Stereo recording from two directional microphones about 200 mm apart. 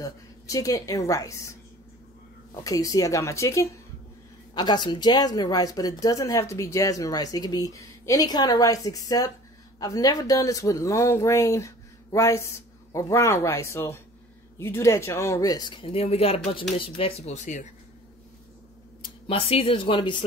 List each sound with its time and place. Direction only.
0.0 s a woman's voice: 15° left (ahead or behind)
2.6 s speech: 15° left (ahead or behind); by 17.6 s 35° left (ahead or behind)
19.2 s speech: 30° left (ahead or behind)